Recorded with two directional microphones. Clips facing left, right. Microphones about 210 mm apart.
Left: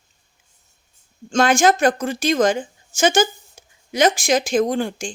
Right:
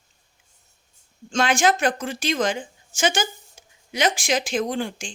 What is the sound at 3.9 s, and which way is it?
Speech, 45° left (ahead or behind).